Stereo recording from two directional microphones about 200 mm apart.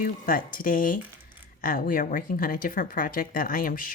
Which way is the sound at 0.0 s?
45° left (ahead or behind).